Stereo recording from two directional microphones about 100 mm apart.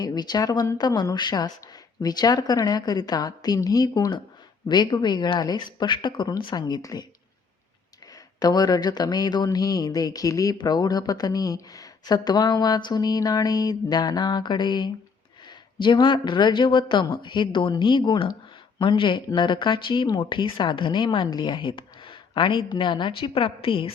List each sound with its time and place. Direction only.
0.0 s speech: 45° left (ahead or behind)
8.4 s speech: 40° left (ahead or behind); by 23.9 s 65° left (ahead or behind)